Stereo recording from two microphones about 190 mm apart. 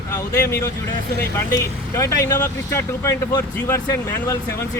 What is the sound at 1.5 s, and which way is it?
Speech, 15° left (ahead or behind).